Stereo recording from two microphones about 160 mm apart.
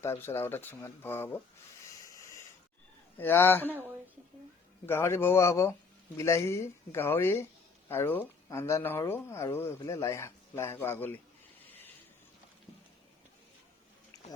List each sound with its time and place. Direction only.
0.0 s speech: 15° left (ahead or behind)
1.9 s a sound: 20° left (ahead or behind)
3.2 s speech: 10° left (ahead or behind)
4.9 s speech: 15° left (ahead or behind)